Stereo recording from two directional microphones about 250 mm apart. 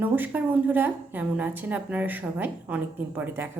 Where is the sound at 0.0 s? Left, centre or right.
Centre.